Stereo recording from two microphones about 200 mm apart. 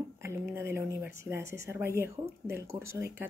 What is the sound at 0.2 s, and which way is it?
A woman's voice, 15° right (ahead or behind).